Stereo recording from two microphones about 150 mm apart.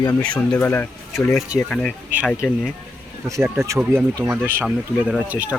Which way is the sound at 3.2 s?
20° right (ahead or behind).